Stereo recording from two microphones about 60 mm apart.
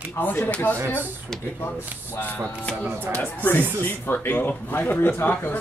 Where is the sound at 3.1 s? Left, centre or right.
Left.